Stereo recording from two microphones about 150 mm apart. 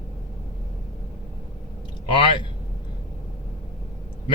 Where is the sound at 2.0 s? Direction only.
35° left (ahead or behind).